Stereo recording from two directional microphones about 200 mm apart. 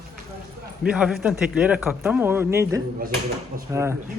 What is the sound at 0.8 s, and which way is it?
A man's voice, 5° right (ahead or behind).